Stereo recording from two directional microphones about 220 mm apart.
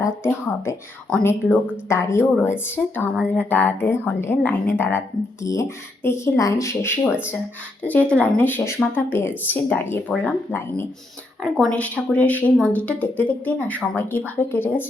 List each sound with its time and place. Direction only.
0.0 s a woman's voice: 10° left (ahead or behind)